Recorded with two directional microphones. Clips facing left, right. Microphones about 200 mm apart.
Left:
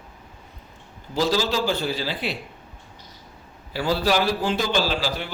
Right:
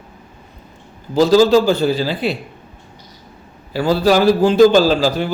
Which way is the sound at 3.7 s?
45° right (ahead or behind).